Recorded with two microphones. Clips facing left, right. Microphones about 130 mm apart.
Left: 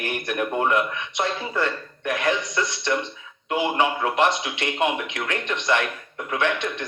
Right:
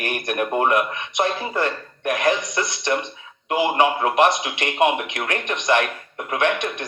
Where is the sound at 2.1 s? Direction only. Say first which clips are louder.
Right 3 dB; 15° right (ahead or behind).